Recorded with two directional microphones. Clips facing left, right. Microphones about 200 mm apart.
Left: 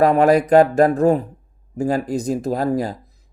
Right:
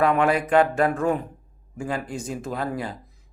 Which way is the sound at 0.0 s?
40° left (ahead or behind).